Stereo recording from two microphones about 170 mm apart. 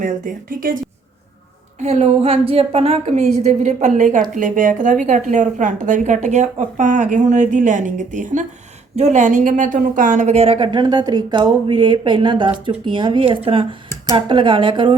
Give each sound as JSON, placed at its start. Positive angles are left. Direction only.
{"t": 0.0, "sound": "a woman's voice", "side_deg": -55}
{"t": 1.8, "sound": "a woman's voice", "side_deg": -40}